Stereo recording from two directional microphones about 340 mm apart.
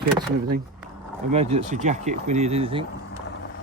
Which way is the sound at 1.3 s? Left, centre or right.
Centre.